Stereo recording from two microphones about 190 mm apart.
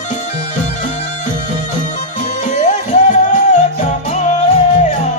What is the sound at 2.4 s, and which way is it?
Music, 40° left (ahead or behind).